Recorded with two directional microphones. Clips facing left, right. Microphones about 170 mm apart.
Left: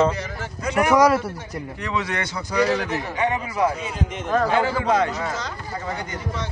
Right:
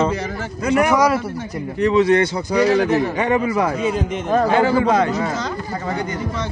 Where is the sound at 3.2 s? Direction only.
60° right (ahead or behind).